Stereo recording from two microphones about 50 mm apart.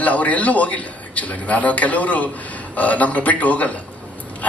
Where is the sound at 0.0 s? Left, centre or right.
Left.